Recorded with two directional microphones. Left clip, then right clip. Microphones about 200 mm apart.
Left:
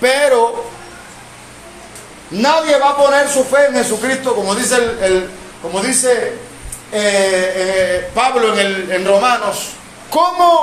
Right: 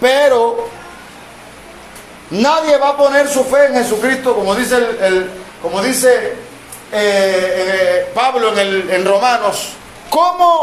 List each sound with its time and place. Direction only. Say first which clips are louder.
0.0 s a man's voice: right 1 dB; 25° right (ahead or behind)
2.3 s a man's voice: right 1 dB; 25° right (ahead or behind); by 8.8 s 5° right (ahead or behind)
8.9 s a man's voice: left 1 dB; 20° right (ahead or behind)